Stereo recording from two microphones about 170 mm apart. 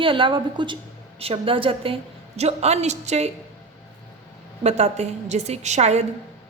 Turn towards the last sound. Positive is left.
turn(degrees=-40)  # may be behind; listen again after turning